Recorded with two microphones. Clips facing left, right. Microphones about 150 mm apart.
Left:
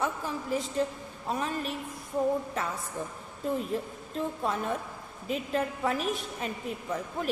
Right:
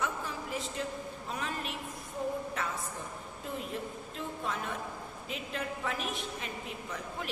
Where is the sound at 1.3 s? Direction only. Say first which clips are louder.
Left 6 dB; 35° left (ahead or behind).